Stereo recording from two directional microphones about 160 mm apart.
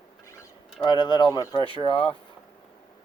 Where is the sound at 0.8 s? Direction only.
30° left (ahead or behind).